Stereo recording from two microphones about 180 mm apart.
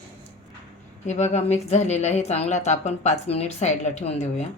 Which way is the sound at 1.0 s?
40° left (ahead or behind).